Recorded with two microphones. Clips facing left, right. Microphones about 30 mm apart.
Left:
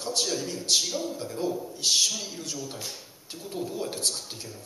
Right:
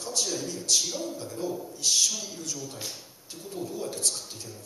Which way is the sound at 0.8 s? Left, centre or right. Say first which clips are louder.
Left 2 dB; centre.